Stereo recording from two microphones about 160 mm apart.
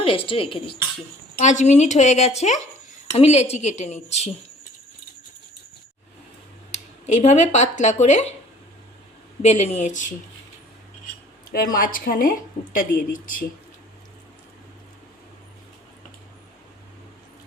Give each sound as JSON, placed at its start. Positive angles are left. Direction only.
{"t": 0.0, "sound": "speech", "side_deg": 35}
{"t": 1.5, "sound": "a woman's voice", "side_deg": 45}
{"t": 6.7, "sound": "speech", "side_deg": 45}
{"t": 9.4, "sound": "a woman's voice", "side_deg": 45}
{"t": 11.5, "sound": "speech", "side_deg": 65}